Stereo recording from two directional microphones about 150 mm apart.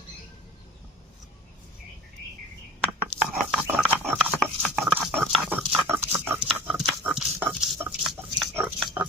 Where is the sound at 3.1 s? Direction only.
40° right (ahead or behind).